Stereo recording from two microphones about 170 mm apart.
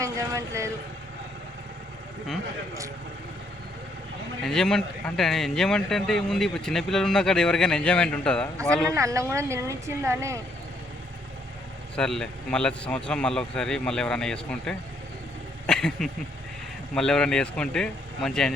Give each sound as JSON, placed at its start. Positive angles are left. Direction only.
{"t": 0.0, "sound": "speech", "side_deg": -20}
{"t": 4.4, "sound": "speech", "side_deg": 5}
{"t": 8.9, "sound": "speech", "side_deg": -20}
{"t": 11.9, "sound": "speech", "side_deg": 5}